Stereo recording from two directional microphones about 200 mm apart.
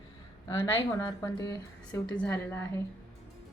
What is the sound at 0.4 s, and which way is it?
A woman's voice, 15° left (ahead or behind).